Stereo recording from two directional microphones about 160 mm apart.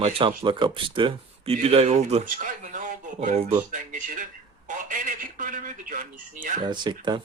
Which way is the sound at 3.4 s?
40° right (ahead or behind).